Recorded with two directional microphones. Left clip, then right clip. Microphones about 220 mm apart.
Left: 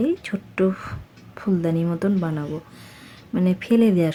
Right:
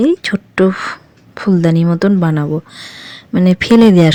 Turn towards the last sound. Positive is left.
turn(degrees=-40)  # may be behind; listen again after turning